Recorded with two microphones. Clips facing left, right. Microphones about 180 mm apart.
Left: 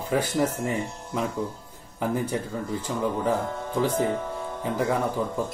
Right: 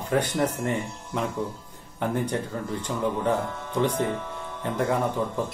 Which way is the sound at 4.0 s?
40° left (ahead or behind).